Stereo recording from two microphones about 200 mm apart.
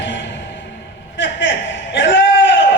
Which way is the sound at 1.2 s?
65° left (ahead or behind).